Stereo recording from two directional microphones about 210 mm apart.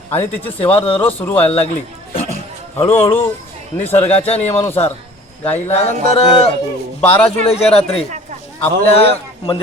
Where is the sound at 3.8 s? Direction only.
30° left (ahead or behind).